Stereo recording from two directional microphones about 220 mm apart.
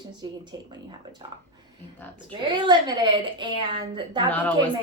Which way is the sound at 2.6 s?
20° right (ahead or behind).